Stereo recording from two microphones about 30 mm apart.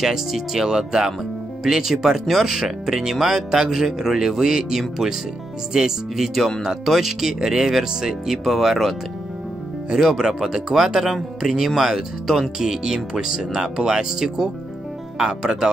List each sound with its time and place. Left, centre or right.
0.0 s speech: centre
2.6 s speech: centre
6.1 s speech: centre
8.3 s speech: centre
9.8 s speech: centre
13.1 s speech: right